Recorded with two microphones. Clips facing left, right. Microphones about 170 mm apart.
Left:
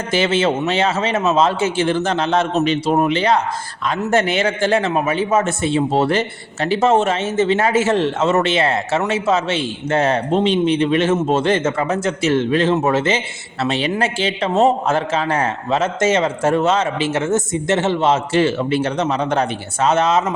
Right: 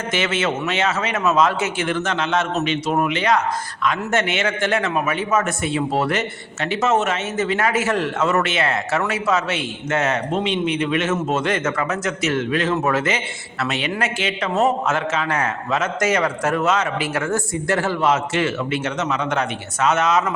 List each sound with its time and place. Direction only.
0.1 s a man's voice: 30° left (ahead or behind)